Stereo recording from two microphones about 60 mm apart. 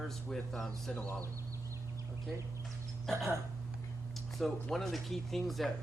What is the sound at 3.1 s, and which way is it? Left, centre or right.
Speech, centre.